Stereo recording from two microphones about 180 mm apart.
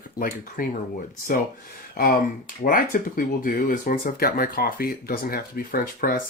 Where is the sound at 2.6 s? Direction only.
50° left (ahead or behind).